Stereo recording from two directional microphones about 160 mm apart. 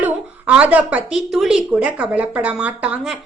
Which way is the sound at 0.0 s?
10° right (ahead or behind).